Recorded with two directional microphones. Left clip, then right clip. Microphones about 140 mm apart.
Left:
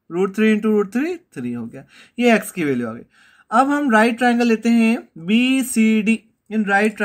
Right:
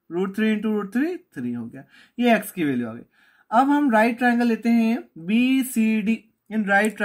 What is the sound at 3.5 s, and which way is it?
Speech, 35° left (ahead or behind).